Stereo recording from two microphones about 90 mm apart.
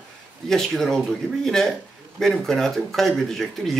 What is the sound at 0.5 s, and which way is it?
Speech, 5° left (ahead or behind).